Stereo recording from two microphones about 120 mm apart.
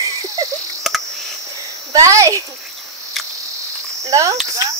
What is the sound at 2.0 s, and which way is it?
Speech, 25° right (ahead or behind).